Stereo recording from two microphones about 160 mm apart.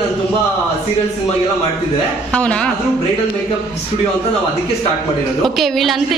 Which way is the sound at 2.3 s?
10° left (ahead or behind).